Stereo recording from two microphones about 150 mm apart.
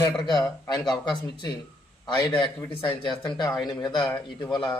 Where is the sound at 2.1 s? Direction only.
35° left (ahead or behind).